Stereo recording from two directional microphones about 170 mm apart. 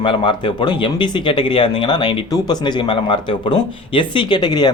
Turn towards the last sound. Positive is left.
turn(degrees=25)  # may be behind; listen again after turning